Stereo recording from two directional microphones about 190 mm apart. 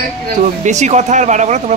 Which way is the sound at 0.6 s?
40° right (ahead or behind).